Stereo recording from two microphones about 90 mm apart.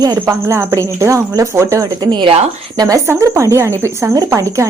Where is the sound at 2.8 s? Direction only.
40° right (ahead or behind).